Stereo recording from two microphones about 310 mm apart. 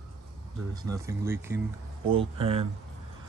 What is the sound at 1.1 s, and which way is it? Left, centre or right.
Speech, centre.